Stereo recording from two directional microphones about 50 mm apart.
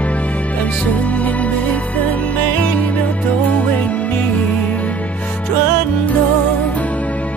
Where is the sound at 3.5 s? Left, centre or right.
Left.